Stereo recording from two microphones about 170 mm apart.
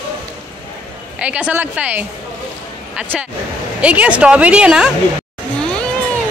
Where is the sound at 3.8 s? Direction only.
10° right (ahead or behind).